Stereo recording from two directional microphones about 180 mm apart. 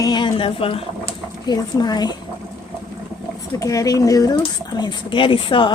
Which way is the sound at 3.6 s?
20° left (ahead or behind).